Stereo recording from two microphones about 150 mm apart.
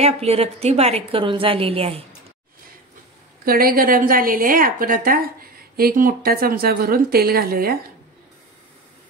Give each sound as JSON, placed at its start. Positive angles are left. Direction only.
{"t": 0.0, "sound": "a woman's voice", "side_deg": -45}
{"t": 3.4, "sound": "a woman's voice", "side_deg": -75}